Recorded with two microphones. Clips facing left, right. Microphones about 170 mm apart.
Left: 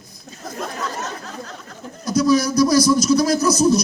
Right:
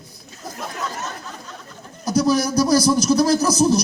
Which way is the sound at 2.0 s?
30° right (ahead or behind).